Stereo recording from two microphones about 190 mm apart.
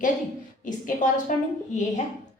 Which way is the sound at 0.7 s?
45° left (ahead or behind).